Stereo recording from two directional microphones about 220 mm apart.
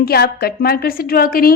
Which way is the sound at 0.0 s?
45° left (ahead or behind).